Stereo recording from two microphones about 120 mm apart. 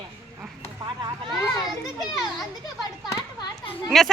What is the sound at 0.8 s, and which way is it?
Children playing, 40° right (ahead or behind).